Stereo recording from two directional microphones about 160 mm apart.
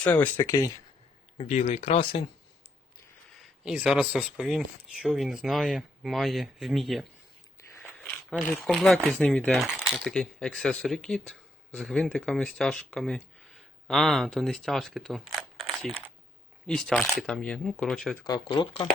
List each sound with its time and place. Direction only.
0.0 s speech: 10° left (ahead or behind)
1.4 s speech: 40° left (ahead or behind)
3.6 s speech: 5° right (ahead or behind)
7.8 s a sound: 10° left (ahead or behind)
8.8 s speech: centre (ahead or behind)
18.3 s speech: 30° left (ahead or behind)